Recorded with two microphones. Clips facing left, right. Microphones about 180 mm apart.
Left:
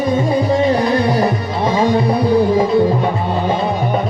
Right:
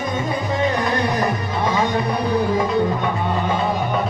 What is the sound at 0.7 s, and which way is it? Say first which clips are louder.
Music: left 6 dB; 30° left (ahead or behind).